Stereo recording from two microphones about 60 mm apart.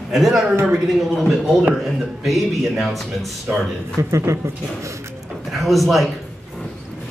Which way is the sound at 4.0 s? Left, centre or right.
Right.